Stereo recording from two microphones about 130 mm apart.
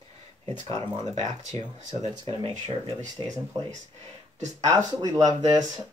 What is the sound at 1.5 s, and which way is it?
Speech, 45° right (ahead or behind).